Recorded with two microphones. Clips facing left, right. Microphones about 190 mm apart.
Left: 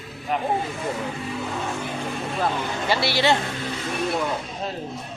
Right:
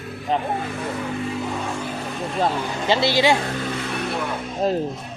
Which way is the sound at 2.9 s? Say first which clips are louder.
Right 3 dB; 20° right (ahead or behind).